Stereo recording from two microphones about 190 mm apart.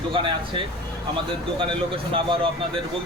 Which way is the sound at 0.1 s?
25° right (ahead or behind).